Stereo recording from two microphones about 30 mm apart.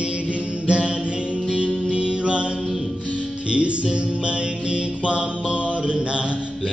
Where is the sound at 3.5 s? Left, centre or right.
Right.